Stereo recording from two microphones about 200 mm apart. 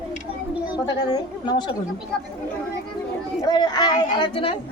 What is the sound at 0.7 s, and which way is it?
Speech, 20° left (ahead or behind).